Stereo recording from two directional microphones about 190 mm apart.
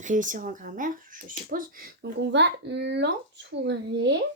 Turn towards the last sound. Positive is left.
turn(degrees=-65)  # may be behind; listen again after turning